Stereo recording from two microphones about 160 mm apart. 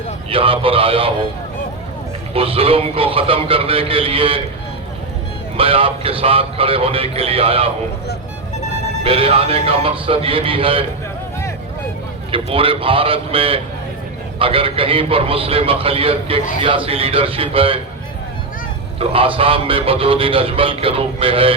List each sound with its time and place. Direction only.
0.3 s speech: 35° right (ahead or behind)
2.3 s speech: 35° right (ahead or behind)
5.5 s speech: 35° right (ahead or behind)
9.0 s speech: 35° right (ahead or behind)
12.3 s speech: 35° right (ahead or behind)
18.9 s speech: 35° right (ahead or behind)